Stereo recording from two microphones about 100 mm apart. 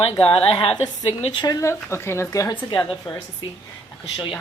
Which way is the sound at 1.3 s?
50° left (ahead or behind).